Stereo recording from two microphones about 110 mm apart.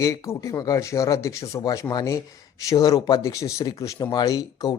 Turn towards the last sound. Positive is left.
turn(degrees=30)  # may be behind; listen again after turning